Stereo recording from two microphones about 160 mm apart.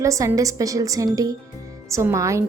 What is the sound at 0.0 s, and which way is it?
A woman's voice, 20° right (ahead or behind).